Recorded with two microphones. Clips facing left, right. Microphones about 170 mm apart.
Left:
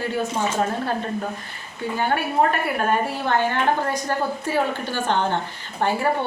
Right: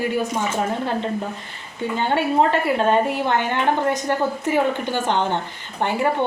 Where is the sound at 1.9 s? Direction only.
25° right (ahead or behind).